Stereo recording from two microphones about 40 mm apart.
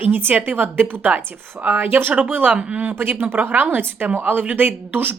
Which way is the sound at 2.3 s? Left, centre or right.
Right.